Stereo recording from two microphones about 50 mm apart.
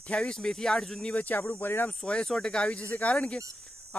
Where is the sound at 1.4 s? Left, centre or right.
Left.